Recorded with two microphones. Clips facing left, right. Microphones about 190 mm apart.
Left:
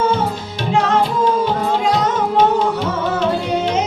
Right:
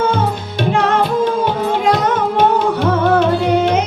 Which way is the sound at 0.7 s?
60° right (ahead or behind).